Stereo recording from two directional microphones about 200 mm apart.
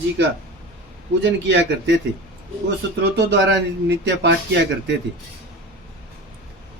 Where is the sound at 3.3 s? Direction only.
60° right (ahead or behind).